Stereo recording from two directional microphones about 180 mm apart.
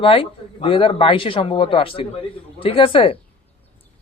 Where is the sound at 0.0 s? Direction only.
30° left (ahead or behind).